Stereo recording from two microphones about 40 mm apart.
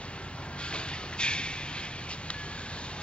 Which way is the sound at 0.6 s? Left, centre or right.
Left.